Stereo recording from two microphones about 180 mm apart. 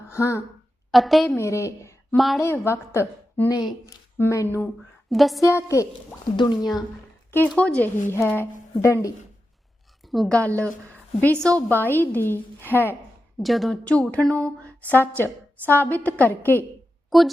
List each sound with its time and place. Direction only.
0.1 s speech: 15° left (ahead or behind)
0.9 s a woman's voice: centre (ahead or behind)
1.4 s a woman's voice: 15° left (ahead or behind)
2.1 s a woman's voice: centre (ahead or behind)
2.4 s a woman's voice: 15° left (ahead or behind)
5.0 s a woman's voice: centre (ahead or behind)
5.4 s a woman's voice: 15° left (ahead or behind)
7.3 s a woman's voice: 10° left (ahead or behind)
10.1 s a woman's voice: centre (ahead or behind)
13.4 s a woman's voice: centre (ahead or behind)
17.1 s a woman's voice: centre (ahead or behind)